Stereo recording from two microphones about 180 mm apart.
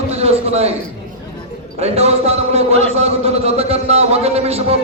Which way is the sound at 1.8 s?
35° right (ahead or behind).